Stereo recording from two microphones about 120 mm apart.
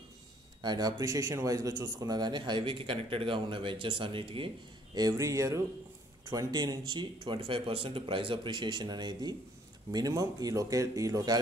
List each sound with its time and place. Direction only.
0.6 s speech: 35° right (ahead or behind)
4.9 s speech: 30° right (ahead or behind)